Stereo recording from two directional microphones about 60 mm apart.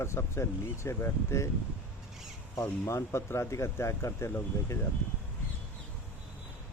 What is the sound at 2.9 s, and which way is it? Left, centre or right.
Speech, left.